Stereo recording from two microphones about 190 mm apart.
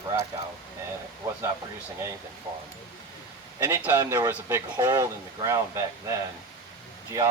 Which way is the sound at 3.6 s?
15° right (ahead or behind).